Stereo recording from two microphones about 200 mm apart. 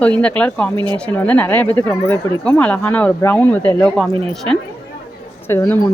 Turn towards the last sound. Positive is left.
turn(degrees=10)  # may be behind; listen again after turning